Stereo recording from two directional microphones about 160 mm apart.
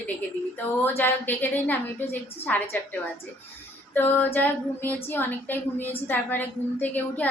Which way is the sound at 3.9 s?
10° left (ahead or behind).